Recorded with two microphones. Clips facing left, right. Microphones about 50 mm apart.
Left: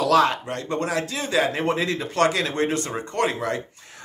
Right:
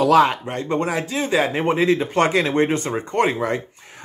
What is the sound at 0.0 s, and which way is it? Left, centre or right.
Speech, right.